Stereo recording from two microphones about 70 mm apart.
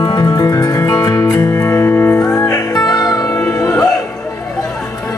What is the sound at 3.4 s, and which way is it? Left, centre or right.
Music, left.